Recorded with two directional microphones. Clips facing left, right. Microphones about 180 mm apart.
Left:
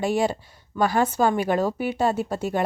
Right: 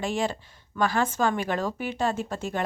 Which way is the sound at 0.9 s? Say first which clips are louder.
Left 5 dB; 40° left (ahead or behind).